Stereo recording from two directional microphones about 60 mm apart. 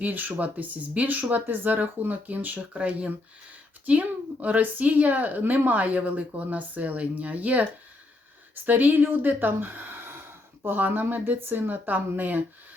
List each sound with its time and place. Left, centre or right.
0.0 s a woman's voice: right